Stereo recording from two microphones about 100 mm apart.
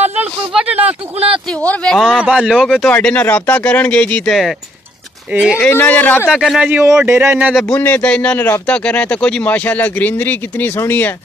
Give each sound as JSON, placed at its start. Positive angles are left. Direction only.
{"t": 0.5, "sound": "a sound", "side_deg": -10}
{"t": 1.6, "sound": "speech", "side_deg": 15}
{"t": 2.0, "sound": "speech", "side_deg": -5}
{"t": 2.9, "sound": "speech", "side_deg": 15}
{"t": 5.3, "sound": "speech", "side_deg": -10}
{"t": 5.7, "sound": "speech", "side_deg": 20}
{"t": 6.3, "sound": "speech", "side_deg": -5}
{"t": 7.1, "sound": "speech", "side_deg": -20}
{"t": 7.6, "sound": "speech", "side_deg": 20}